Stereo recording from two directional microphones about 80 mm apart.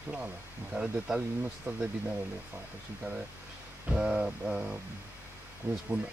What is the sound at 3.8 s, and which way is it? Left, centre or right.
Speech, centre.